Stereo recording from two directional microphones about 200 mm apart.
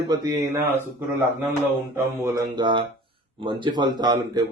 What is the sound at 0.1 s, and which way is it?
Speech, 20° right (ahead or behind).